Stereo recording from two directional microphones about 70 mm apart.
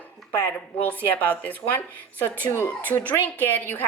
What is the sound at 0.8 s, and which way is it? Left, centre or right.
Speech, left.